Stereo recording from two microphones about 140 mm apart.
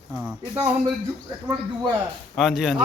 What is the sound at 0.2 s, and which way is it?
Speech, 5° right (ahead or behind).